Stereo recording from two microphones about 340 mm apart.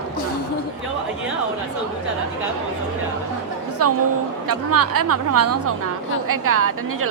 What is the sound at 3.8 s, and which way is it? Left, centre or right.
A woman's voice, right.